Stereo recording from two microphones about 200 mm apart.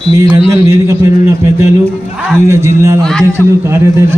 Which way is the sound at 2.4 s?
15° right (ahead or behind).